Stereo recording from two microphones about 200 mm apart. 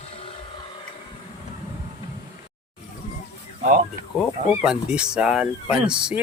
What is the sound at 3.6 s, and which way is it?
Speech, 40° right (ahead or behind).